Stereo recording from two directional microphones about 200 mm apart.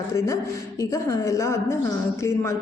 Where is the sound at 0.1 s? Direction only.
15° left (ahead or behind).